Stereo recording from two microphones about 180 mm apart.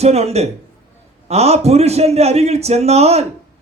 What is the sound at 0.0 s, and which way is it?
A man's voice, 35° right (ahead or behind).